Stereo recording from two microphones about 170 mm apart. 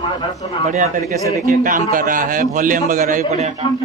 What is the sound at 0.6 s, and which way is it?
Speech, 45° right (ahead or behind).